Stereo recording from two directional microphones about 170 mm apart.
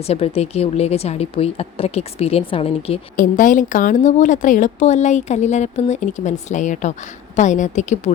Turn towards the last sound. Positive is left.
turn(degrees=45)  # may be behind; listen again after turning